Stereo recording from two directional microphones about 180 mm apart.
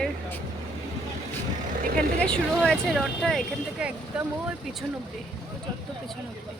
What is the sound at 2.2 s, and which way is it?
Speech, 5° left (ahead or behind).